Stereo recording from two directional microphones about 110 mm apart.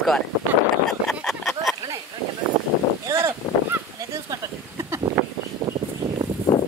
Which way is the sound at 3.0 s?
25° right (ahead or behind).